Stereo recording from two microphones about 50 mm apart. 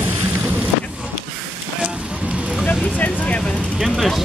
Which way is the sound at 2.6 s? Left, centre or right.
Left.